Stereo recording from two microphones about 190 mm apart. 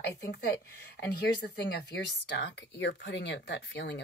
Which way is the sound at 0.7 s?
60° left (ahead or behind).